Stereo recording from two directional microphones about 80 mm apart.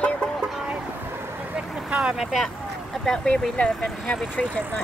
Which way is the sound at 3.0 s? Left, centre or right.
Centre.